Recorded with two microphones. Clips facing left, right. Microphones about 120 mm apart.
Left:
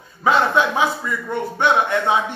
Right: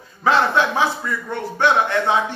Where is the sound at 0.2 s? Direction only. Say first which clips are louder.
Even; 15° left (ahead or behind).